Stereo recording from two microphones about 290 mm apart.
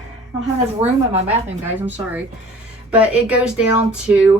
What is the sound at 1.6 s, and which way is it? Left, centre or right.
Speech, centre.